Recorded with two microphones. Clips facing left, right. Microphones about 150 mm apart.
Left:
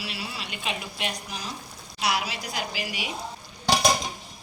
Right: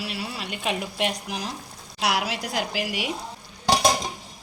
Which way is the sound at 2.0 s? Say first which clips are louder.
Right 3 dB; 80° right.